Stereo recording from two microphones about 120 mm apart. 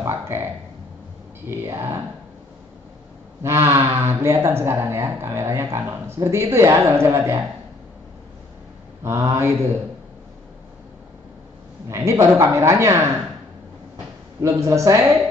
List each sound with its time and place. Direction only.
0.0 s speech: 20° right (ahead or behind)
1.5 s speech: 20° right (ahead or behind)
3.4 s speech: 20° right (ahead or behind)
9.0 s speech: 25° right (ahead or behind)
11.9 s speech: 25° right (ahead or behind)
14.4 s speech: 25° right (ahead or behind)